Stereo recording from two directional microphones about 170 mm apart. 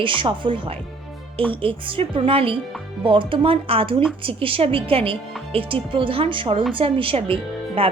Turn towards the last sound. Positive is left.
turn(degrees=-35)  # may be behind; listen again after turning